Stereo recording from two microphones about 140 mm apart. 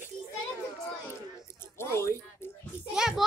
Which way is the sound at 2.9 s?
5° right (ahead or behind).